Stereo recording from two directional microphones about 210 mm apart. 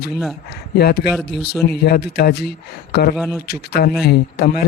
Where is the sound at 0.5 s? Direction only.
50° left (ahead or behind).